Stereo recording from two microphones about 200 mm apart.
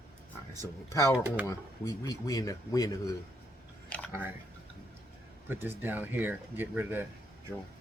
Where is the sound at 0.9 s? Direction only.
15° left (ahead or behind).